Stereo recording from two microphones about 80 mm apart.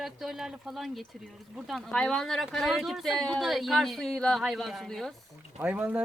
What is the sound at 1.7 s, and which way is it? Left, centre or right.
Speech, centre.